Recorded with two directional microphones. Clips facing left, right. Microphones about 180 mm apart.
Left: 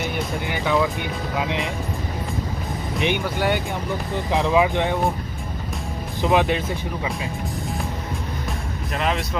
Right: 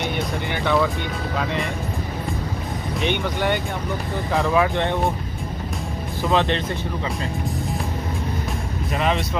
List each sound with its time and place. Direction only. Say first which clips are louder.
0.0 s speech: right 1 dB; 10° left (ahead or behind)
3.0 s speech: left 1 dB; 15° left (ahead or behind)
6.2 s speech: left 1 dB; 10° left (ahead or behind)
8.9 s speech: right 2 dB; centre (ahead or behind)